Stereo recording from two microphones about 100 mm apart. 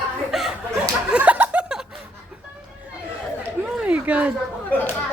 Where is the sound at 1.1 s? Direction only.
15° right (ahead or behind).